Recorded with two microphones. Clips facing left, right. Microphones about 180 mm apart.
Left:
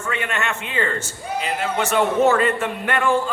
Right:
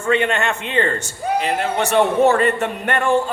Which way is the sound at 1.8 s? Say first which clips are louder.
Right 2 dB; 35° right (ahead or behind).